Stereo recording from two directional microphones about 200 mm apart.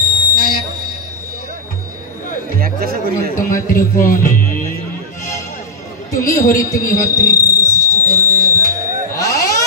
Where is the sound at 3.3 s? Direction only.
40° left (ahead or behind).